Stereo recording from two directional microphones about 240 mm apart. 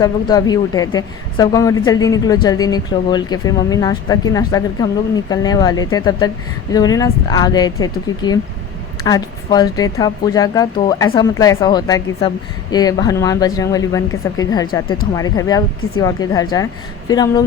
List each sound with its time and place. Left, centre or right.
0.0 s speech: centre
9.0 s speech: centre